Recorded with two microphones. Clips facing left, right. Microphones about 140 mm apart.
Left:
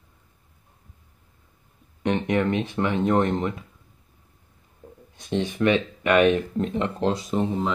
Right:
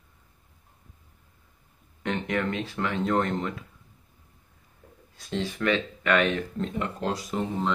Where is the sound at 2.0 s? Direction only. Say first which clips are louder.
Left 5 dB; 20° left (ahead or behind).